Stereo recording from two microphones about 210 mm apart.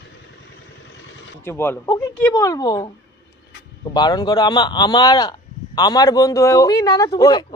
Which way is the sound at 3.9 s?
20° left (ahead or behind).